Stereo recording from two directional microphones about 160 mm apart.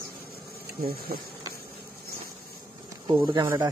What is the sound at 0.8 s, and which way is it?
Speech, 70° right (ahead or behind).